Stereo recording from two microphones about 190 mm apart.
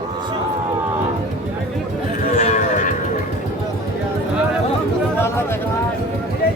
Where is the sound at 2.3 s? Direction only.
40° left (ahead or behind).